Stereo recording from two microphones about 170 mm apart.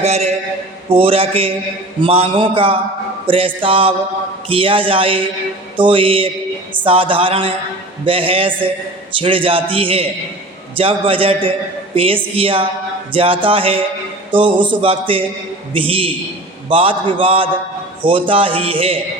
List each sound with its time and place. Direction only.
0.0 s a man's voice: 40° right (ahead or behind)